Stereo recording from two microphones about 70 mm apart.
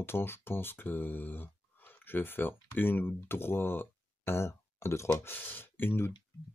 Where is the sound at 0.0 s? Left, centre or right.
Left.